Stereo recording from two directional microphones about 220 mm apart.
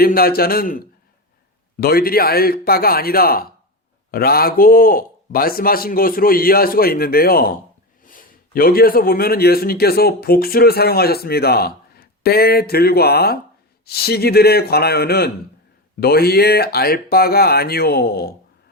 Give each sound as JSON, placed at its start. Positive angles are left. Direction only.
{"t": 0.0, "sound": "speech", "side_deg": 45}